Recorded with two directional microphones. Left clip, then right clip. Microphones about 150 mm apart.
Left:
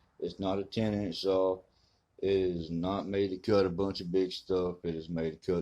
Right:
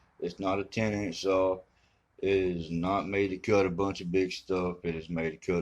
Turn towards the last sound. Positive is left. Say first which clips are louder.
# right 1 dB
turn(degrees=25)  # may be behind; listen again after turning